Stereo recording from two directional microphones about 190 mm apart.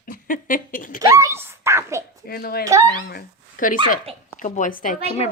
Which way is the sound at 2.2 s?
55° left (ahead or behind).